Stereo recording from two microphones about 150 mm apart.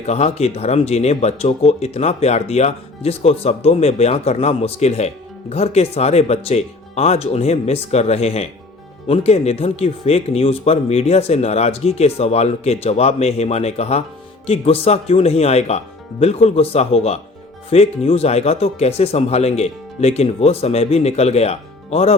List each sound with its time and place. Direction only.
0.0 s speech: 45° left (ahead or behind)